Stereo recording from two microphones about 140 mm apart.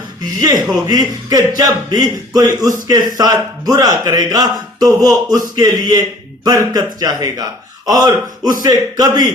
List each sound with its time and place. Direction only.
0.4 s speech: 30° right (ahead or behind)